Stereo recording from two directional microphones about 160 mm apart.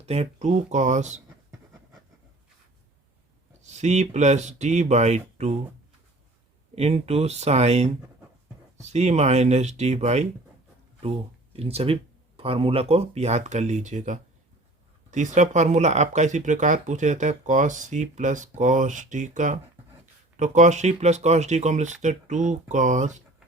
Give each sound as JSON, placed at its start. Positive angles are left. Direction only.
{"t": 0.0, "sound": "speech", "side_deg": -40}
{"t": 3.6, "sound": "speech", "side_deg": -45}
{"t": 6.7, "sound": "speech", "side_deg": -40}
{"t": 11.5, "sound": "speech", "side_deg": -40}